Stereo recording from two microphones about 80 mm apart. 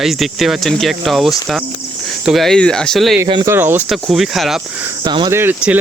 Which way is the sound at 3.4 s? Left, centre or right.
Right.